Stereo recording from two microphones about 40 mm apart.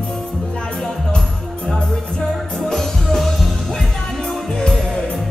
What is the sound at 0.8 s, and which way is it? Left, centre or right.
Music, centre.